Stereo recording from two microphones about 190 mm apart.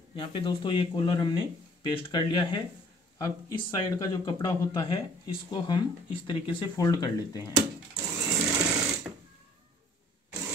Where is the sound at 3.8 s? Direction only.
20° left (ahead or behind).